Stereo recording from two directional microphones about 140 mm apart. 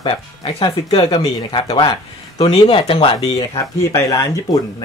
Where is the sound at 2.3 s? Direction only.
50° left (ahead or behind).